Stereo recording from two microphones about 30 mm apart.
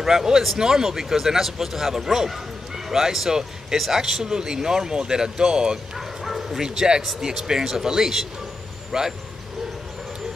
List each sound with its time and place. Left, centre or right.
0.0 s speech: centre
4.0 s speech: right
5.9 s bow-wow: centre
7.2 s speech: centre